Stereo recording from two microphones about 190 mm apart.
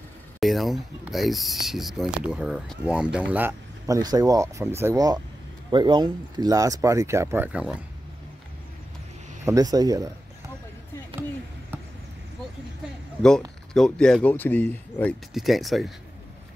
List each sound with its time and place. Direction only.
0.4 s speech: centre (ahead or behind)
9.4 s speech: 15° right (ahead or behind)
13.2 s speech: 5° left (ahead or behind)